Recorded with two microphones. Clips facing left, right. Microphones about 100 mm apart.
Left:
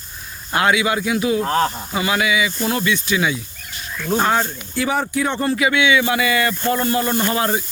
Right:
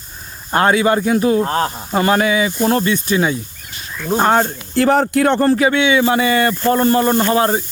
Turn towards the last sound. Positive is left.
turn(degrees=-30)  # may be behind; listen again after turning